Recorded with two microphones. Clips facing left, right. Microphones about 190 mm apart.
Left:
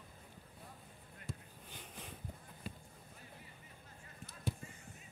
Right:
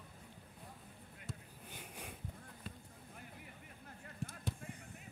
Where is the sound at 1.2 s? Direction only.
10° right (ahead or behind).